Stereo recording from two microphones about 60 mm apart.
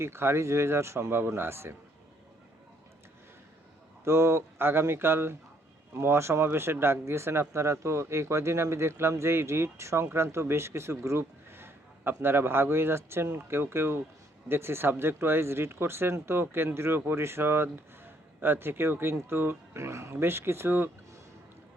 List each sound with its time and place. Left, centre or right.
0.0 s speech: right
4.0 s speech: right
11.2 s a sound: right
12.2 s speech: right
19.7 s speech: right